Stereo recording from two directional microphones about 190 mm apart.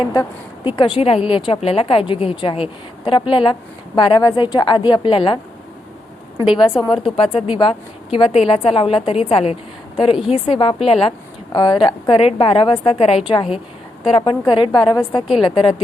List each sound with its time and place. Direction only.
0.0 s a woman's voice: 25° left (ahead or behind)
6.8 s a woman's voice: 30° left (ahead or behind)